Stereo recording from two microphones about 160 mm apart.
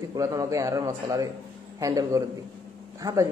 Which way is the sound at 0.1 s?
20° right (ahead or behind).